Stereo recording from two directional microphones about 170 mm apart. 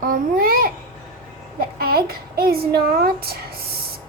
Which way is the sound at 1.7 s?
65° right (ahead or behind).